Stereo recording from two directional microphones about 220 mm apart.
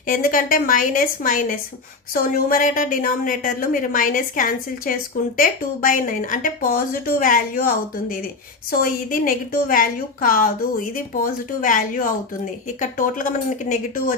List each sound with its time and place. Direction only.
0.0 s a woman's voice: 40° left (ahead or behind)
8.7 s a woman's voice: 40° left (ahead or behind)